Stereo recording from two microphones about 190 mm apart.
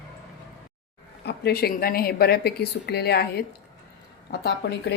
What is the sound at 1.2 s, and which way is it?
Speech, 55° left (ahead or behind).